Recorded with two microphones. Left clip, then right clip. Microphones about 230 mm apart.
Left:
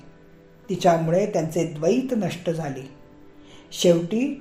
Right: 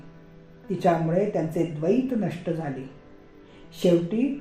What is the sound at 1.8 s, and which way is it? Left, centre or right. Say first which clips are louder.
Speech: left 3 dB; left.